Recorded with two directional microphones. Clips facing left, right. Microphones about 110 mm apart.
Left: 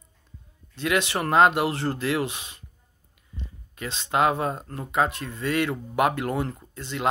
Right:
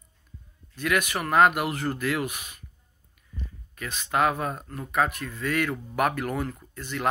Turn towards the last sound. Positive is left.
turn(degrees=20)  # may be behind; listen again after turning